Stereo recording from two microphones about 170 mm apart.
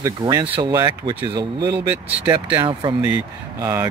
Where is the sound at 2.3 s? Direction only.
30° right (ahead or behind).